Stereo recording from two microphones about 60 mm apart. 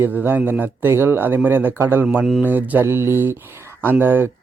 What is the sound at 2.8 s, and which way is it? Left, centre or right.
Speech, right.